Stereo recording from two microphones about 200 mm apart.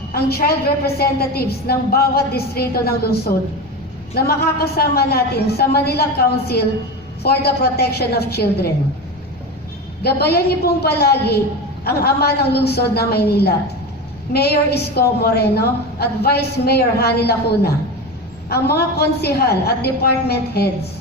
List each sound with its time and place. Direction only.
0.1 s a woman's voice: 50° left (ahead or behind)
10.0 s a woman's voice: 50° left (ahead or behind)